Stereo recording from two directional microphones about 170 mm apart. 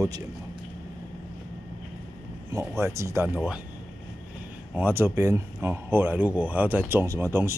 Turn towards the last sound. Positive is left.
turn(degrees=-15)  # may be behind; listen again after turning